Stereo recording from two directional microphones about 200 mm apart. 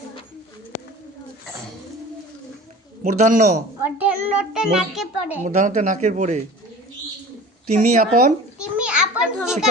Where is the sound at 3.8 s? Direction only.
10° right (ahead or behind).